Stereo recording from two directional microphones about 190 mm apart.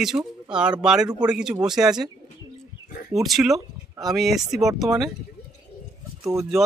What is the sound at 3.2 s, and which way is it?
Speech, centre (ahead or behind).